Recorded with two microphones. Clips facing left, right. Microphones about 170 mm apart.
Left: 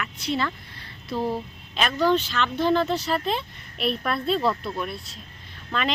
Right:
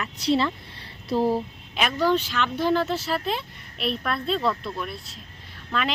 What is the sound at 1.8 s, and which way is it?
Speech, 10° right (ahead or behind).